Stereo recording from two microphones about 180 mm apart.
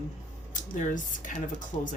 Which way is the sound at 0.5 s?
45° left (ahead or behind).